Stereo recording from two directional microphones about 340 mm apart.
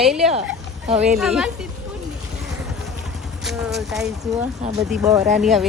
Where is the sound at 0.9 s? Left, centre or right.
Centre.